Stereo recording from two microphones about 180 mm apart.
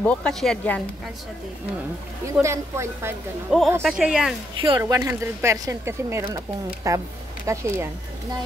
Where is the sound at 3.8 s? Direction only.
Centre (ahead or behind).